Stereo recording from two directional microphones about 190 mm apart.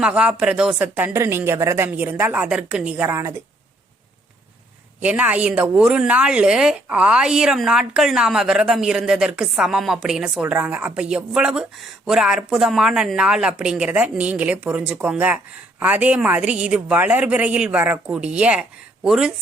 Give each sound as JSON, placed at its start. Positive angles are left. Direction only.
{"t": 0.0, "sound": "a woman's voice", "side_deg": -5}
{"t": 5.0, "sound": "a woman's voice", "side_deg": -5}